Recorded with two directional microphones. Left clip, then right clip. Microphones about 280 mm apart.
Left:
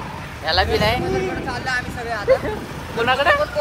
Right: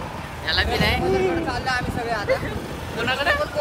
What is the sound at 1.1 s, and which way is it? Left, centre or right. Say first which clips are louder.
Speech: right 1 dB; centre.